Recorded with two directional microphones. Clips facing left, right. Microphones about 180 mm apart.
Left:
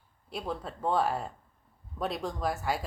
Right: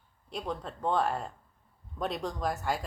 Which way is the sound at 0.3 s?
5° left (ahead or behind).